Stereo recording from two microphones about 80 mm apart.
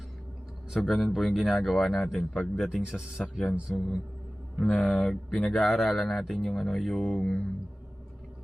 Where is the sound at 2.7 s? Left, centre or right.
Centre.